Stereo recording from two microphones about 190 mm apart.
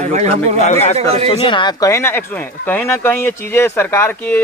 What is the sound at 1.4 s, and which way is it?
Speech, 25° left (ahead or behind).